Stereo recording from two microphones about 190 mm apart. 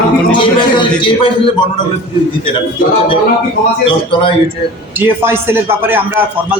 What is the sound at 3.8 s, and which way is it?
Speech, 25° left (ahead or behind).